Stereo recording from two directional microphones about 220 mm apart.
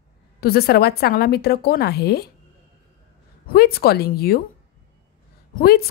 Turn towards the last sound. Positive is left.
turn(degrees=45)  # may be behind; listen again after turning